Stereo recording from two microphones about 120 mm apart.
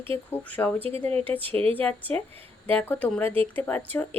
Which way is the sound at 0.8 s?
55° right (ahead or behind).